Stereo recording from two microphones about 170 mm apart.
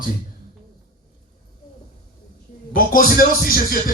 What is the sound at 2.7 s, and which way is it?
Speech, 60° left (ahead or behind).